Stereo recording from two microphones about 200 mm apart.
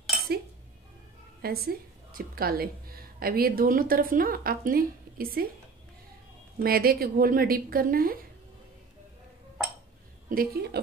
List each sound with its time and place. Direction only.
1.4 s a woman's voice: 50° right (ahead or behind)
6.6 s a woman's voice: 50° right (ahead or behind)
10.3 s a woman's voice: 50° right (ahead or behind)